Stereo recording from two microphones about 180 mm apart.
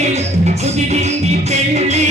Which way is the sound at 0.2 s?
40° right (ahead or behind).